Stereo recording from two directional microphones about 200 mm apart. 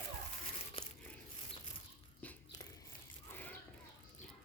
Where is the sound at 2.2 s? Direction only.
5° left (ahead or behind).